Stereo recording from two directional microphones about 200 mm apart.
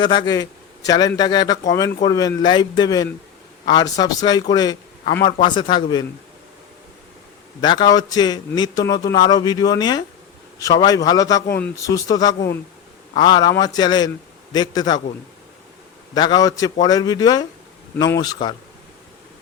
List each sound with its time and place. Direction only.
0.0 s a man's voice: 20° left (ahead or behind)
7.6 s a man's voice: 20° left (ahead or behind)
16.1 s a man's voice: 20° left (ahead or behind)